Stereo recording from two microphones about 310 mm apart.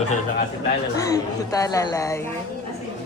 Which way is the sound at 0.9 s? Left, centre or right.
Centre.